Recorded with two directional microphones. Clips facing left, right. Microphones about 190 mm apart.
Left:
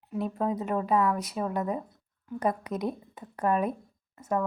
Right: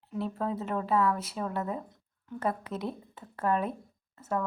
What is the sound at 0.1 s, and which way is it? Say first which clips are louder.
A woman's voice: left 3 dB; 15° left (ahead or behind).